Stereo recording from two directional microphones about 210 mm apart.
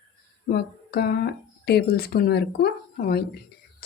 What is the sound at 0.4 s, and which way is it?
Speech, 50° left (ahead or behind).